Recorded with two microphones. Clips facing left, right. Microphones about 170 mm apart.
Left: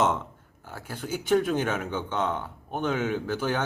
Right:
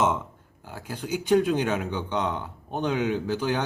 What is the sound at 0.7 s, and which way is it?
Speech, 15° right (ahead or behind).